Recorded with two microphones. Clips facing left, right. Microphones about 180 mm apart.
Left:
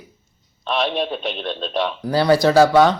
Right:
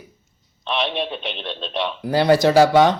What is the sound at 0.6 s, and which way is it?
Speech, 45° left (ahead or behind).